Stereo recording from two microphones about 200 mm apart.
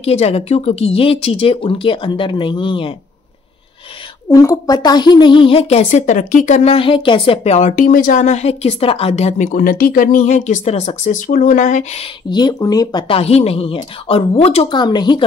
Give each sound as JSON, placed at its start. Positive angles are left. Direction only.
{"t": 0.0, "sound": "speech", "side_deg": 30}
{"t": 4.3, "sound": "a woman's voice", "side_deg": 15}